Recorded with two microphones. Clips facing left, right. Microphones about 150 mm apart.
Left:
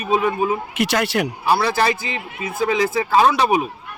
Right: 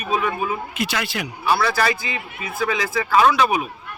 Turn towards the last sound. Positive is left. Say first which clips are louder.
# left 1 dB
turn(degrees=30)  # may be behind; listen again after turning